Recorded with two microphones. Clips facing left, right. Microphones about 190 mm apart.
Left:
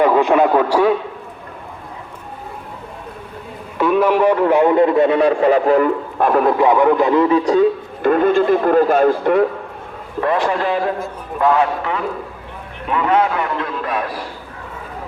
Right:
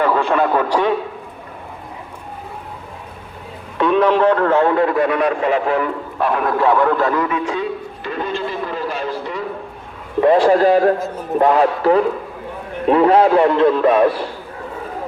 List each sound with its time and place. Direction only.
0.0 s speech: 15° left (ahead or behind)
3.8 s a man's voice: 5° left (ahead or behind); by 6.4 s 45° left (ahead or behind)
6.4 s speech: 15° left (ahead or behind); by 9.5 s 55° left (ahead or behind)
10.2 s a man's voice: 30° right (ahead or behind)